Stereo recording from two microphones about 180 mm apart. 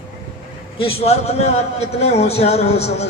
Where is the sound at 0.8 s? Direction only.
35° left (ahead or behind).